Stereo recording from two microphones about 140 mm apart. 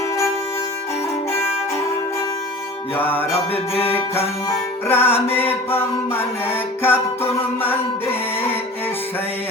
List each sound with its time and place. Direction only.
2.9 s music: 15° left (ahead or behind)
4.4 s music: 15° left (ahead or behind)